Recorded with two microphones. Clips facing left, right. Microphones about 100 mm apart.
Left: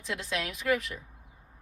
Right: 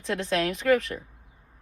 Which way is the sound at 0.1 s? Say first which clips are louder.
Right 8 dB; 55° right (ahead or behind).